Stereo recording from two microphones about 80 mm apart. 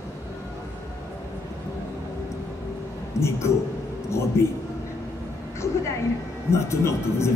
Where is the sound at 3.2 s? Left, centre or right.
Left.